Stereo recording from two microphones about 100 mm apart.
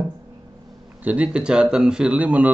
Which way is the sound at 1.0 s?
10° right (ahead or behind).